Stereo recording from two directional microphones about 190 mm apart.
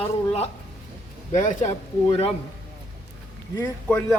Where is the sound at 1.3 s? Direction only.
40° left (ahead or behind).